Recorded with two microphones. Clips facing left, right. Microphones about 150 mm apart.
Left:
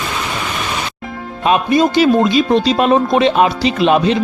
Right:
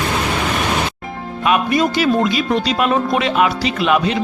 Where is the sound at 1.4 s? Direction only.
30° left (ahead or behind).